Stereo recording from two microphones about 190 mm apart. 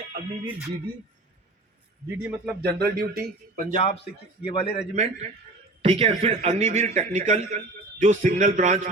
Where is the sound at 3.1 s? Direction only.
50° right (ahead or behind).